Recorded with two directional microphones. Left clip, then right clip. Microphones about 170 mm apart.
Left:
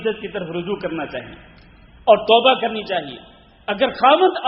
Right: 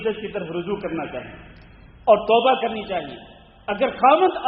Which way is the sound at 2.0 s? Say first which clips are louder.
Left 3 dB; 30° left (ahead or behind).